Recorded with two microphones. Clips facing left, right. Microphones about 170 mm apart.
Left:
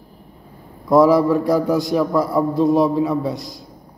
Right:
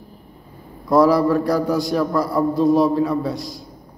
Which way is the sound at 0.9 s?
20° left (ahead or behind).